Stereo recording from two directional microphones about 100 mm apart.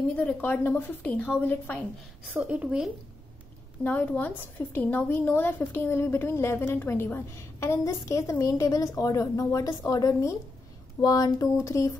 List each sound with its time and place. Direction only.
0.1 s a woman's voice: 15° left (ahead or behind)
2.3 s a woman's voice: 15° right (ahead or behind)
3.8 s a woman's voice: 15° left (ahead or behind); by 11.9 s 30° left (ahead or behind)